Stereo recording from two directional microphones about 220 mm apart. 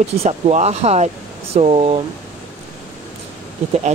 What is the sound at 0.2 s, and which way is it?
Speech, 30° right (ahead or behind).